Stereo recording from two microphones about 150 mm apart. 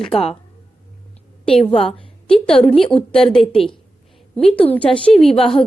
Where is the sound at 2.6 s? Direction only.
5° left (ahead or behind).